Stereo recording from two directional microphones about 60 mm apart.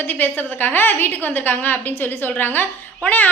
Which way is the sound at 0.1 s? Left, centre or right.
Left.